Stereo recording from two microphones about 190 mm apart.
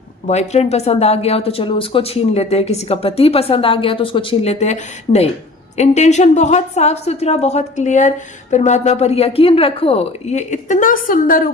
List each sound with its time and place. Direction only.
0.3 s a woman's voice: 35° left (ahead or behind)